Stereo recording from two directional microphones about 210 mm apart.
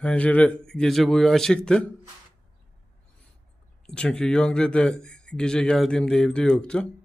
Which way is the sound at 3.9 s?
5° left (ahead or behind).